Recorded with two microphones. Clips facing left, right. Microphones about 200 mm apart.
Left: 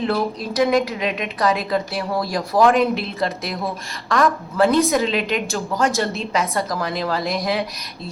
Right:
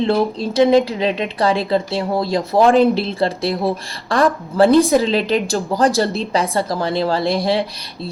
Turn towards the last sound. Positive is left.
turn(degrees=-30)  # may be behind; listen again after turning